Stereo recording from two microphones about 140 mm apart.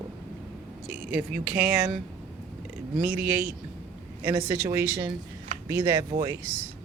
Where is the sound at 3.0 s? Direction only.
15° right (ahead or behind).